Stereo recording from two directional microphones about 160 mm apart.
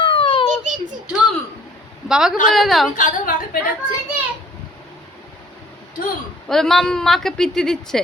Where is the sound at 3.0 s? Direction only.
55° left (ahead or behind).